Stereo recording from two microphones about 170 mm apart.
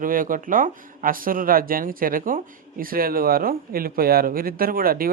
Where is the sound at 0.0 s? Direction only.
55° right (ahead or behind).